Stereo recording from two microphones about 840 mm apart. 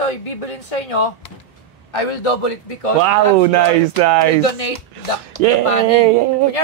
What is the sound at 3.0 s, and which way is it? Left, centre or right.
Speech, right.